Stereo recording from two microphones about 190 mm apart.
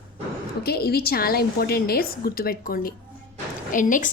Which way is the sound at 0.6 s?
55° left (ahead or behind).